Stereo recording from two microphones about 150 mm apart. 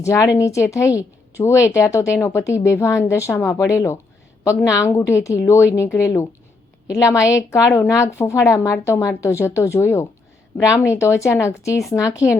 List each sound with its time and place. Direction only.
0.0 s a woman's voice: 20° left (ahead or behind)
11.8 s speech: centre (ahead or behind)